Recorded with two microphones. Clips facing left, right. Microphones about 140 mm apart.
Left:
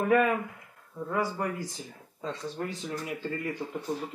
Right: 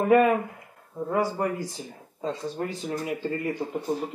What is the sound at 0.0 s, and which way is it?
Speech, 35° right (ahead or behind).